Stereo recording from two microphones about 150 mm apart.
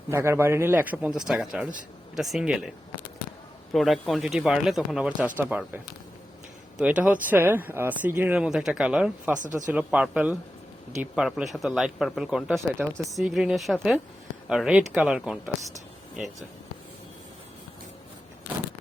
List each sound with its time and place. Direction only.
0.1 s speech: 15° right (ahead or behind)